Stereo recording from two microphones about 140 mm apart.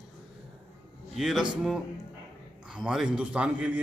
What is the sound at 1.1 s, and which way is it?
A man's voice, centre (ahead or behind).